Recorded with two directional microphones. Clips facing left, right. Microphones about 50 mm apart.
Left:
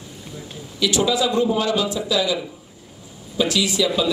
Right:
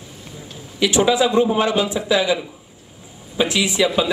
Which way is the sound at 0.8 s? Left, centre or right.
Right.